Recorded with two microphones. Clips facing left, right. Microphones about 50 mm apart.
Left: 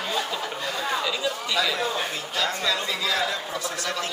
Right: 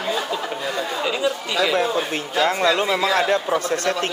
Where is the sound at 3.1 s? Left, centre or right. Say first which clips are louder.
Right 8 dB; right.